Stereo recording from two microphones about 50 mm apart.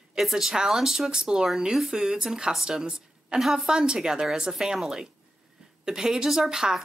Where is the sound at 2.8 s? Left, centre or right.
Centre.